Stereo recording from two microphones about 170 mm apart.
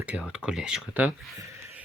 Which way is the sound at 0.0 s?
10° right (ahead or behind).